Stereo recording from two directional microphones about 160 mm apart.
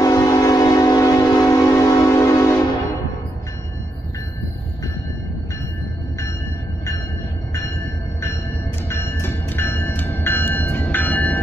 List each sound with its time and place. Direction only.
0.0 s train: 20° left (ahead or behind)
8.8 s train: 15° left (ahead or behind)